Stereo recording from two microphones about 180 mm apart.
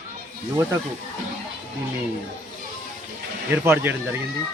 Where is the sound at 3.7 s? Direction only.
10° right (ahead or behind).